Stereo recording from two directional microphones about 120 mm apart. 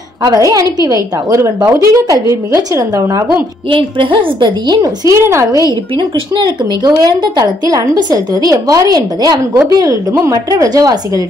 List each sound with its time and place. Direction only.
0.2 s a woman's voice: 30° right (ahead or behind)
3.7 s a woman's voice: 45° right (ahead or behind); by 5.8 s 30° right (ahead or behind)
5.9 s a woman's voice: 40° right (ahead or behind)